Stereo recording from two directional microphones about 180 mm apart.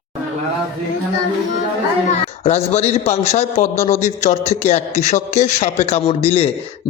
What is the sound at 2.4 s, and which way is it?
A man's voice, 35° left (ahead or behind).